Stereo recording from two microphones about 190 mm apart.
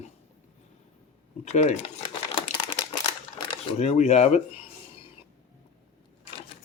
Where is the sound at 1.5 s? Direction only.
35° left (ahead or behind).